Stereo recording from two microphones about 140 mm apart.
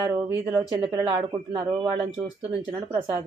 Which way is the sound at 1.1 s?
35° right (ahead or behind).